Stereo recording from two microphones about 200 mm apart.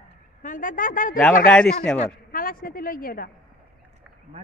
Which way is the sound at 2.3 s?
45° left (ahead or behind).